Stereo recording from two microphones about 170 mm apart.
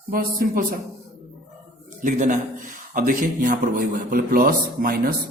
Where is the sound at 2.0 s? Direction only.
50° right (ahead or behind).